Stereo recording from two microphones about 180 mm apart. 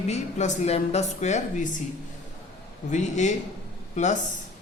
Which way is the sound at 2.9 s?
40° left (ahead or behind).